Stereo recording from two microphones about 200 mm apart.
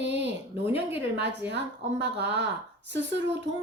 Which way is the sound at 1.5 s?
60° right (ahead or behind).